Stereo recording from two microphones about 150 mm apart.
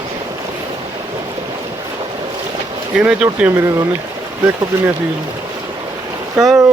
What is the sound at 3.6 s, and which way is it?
Speech, 20° right (ahead or behind).